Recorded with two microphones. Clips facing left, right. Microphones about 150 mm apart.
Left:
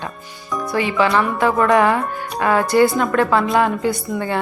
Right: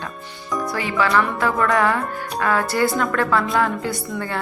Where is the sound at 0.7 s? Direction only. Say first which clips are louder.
Left 4 dB; 20° left (ahead or behind).